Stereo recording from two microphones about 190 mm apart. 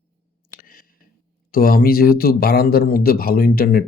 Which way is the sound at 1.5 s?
50° left (ahead or behind).